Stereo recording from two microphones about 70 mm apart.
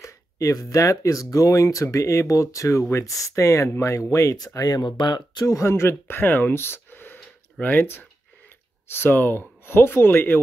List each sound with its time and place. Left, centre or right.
0.0 s speech: left
4.6 s speech: left
5.5 s speech: left